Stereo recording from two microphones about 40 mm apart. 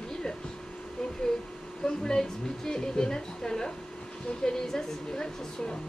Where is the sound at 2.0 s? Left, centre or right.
Centre.